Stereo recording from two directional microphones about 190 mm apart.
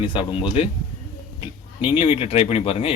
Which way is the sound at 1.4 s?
30° left (ahead or behind).